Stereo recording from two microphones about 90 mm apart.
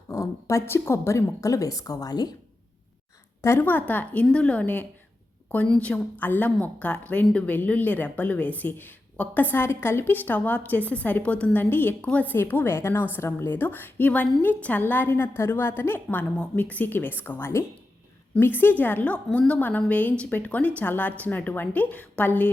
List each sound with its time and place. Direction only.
0.1 s speech: 35° left (ahead or behind)
3.4 s a woman's voice: 25° left (ahead or behind)